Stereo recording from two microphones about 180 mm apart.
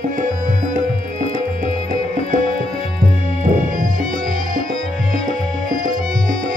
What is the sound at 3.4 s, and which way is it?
Music, 45° right (ahead or behind).